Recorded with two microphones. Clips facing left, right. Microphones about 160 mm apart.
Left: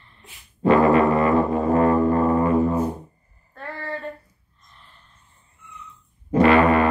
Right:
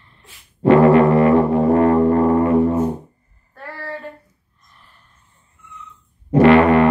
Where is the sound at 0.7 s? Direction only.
70° right (ahead or behind).